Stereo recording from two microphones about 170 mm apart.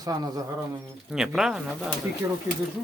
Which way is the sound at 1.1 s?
5° right (ahead or behind).